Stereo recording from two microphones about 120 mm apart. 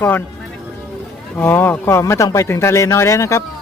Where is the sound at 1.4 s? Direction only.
15° left (ahead or behind).